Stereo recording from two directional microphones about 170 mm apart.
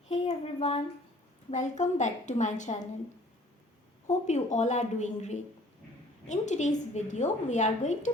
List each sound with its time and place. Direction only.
0.1 s a sound: 40° left (ahead or behind)
1.5 s a woman's voice: 45° left (ahead or behind)
4.0 s a woman's voice: 45° left (ahead or behind)